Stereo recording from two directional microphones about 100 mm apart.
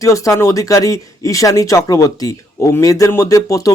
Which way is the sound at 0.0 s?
30° left (ahead or behind).